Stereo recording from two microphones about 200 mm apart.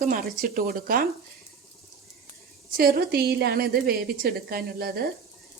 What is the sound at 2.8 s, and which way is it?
A woman's voice, 50° right (ahead or behind).